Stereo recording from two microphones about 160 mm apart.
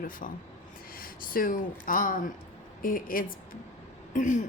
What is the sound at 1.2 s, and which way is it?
Speech, 60° left (ahead or behind).